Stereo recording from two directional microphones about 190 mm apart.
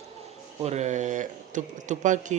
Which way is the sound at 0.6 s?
35° right (ahead or behind).